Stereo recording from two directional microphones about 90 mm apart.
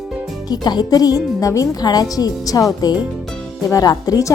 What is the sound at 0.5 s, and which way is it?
A woman's voice, 50° left (ahead or behind).